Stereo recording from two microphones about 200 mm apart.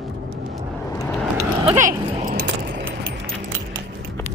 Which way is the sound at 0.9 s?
15° left (ahead or behind).